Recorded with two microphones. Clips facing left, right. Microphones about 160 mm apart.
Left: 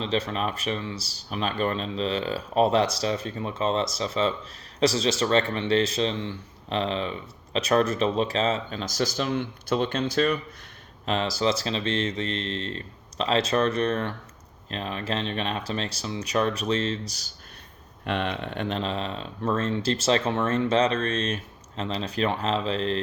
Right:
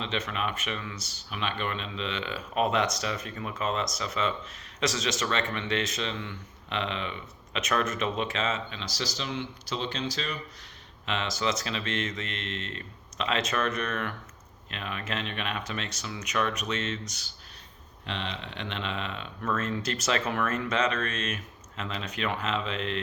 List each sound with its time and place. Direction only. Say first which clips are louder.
0.0 s speech: left 5 dB; 35° left (ahead or behind); by 10.3 s 55° left (ahead or behind)
11.0 s speech: left 5 dB; 35° left (ahead or behind)
18.0 s speech: left 8 dB; 55° left (ahead or behind); by 23.0 s 35° left (ahead or behind)